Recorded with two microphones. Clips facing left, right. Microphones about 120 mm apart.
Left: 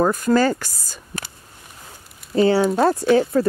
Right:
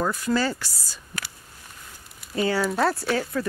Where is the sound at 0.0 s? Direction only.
50° left (ahead or behind).